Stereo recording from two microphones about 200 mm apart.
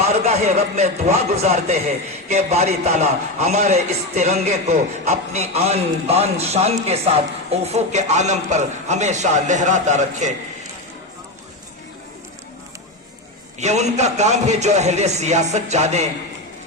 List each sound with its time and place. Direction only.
0.0 s a man's voice: 35° right (ahead or behind)
13.6 s a man's voice: 35° right (ahead or behind)